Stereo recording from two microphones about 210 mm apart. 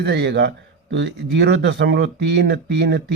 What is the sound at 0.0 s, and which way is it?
A man's voice, 55° right (ahead or behind).